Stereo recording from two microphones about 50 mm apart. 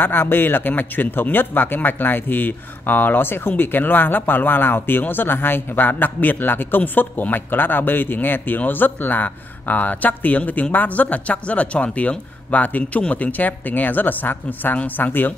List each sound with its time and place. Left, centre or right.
0.0 s speech: left